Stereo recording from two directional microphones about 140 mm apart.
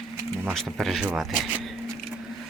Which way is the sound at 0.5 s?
Centre (ahead or behind).